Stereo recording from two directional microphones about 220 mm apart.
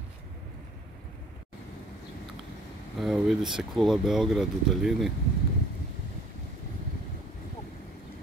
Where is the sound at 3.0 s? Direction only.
Centre (ahead or behind).